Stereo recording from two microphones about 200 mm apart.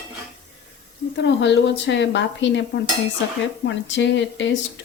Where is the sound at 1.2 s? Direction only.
60° left (ahead or behind).